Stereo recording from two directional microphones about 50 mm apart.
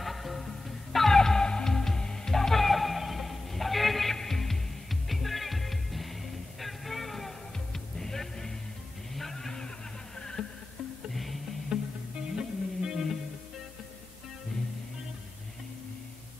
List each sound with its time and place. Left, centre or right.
0.0 s music: centre
9.1 s vehicle: centre
10.1 s a sound: centre
11.7 s music: centre